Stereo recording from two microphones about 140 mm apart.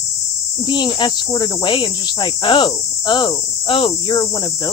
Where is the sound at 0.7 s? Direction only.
35° left (ahead or behind).